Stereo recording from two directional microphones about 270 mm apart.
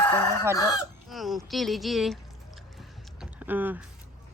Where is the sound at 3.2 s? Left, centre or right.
Centre.